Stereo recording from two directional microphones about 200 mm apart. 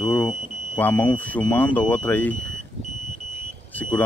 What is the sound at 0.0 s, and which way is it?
Speech, 10° left (ahead or behind).